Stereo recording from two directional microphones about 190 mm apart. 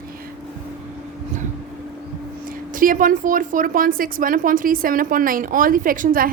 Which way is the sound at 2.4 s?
45° right (ahead or behind).